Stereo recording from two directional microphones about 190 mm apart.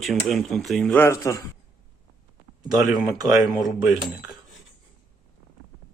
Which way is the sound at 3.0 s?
20° right (ahead or behind).